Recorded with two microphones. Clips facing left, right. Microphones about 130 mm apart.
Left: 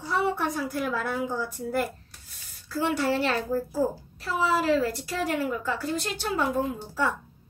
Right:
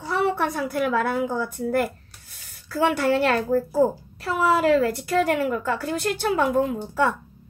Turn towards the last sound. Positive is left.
turn(degrees=-60)  # may be behind; listen again after turning